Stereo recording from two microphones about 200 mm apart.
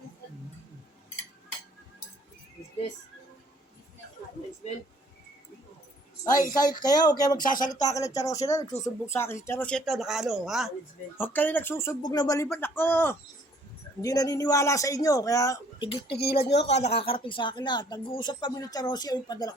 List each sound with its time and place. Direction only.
6.6 s speech: 20° left (ahead or behind)
7.4 s speech: 45° left (ahead or behind)
7.7 s speech: 15° left (ahead or behind); by 10.7 s centre (ahead or behind)
11.2 s speech: 10° left (ahead or behind)
16.0 s speech: 55° left (ahead or behind)
16.6 s speech: 35° left (ahead or behind)